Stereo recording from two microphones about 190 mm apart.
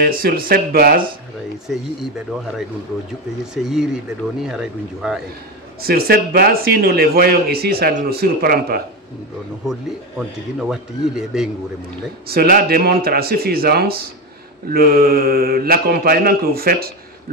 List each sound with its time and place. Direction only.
0.0 s speech: 50° right (ahead or behind)
3.5 s speech: 5° right (ahead or behind)
5.8 s a man's voice: 55° right (ahead or behind)
9.7 s speech: 5° right (ahead or behind)
12.3 s speech: 55° right (ahead or behind)